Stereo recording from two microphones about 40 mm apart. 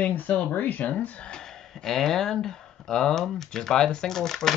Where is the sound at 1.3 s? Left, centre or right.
Centre.